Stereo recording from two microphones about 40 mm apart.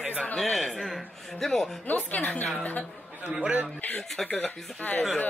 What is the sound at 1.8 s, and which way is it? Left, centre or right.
Speech, left.